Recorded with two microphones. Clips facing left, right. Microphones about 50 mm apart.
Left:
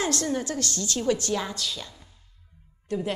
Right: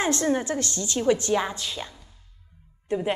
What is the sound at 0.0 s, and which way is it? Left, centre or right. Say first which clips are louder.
A woman's voice: right 3 dB; right.